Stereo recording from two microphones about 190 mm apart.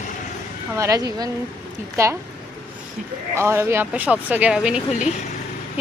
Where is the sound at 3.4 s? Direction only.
15° right (ahead or behind).